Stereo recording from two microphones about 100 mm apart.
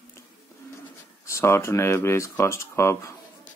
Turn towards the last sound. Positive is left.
turn(degrees=25)  # may be behind; listen again after turning